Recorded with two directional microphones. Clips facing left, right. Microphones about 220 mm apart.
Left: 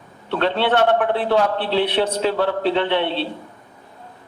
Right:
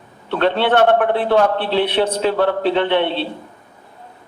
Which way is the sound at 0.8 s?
50° right (ahead or behind).